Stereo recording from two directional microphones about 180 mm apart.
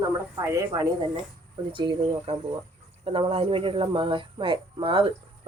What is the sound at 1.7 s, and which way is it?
Speech, 25° right (ahead or behind).